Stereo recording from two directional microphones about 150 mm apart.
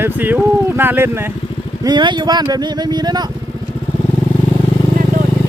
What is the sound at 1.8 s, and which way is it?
Speech, 30° right (ahead or behind).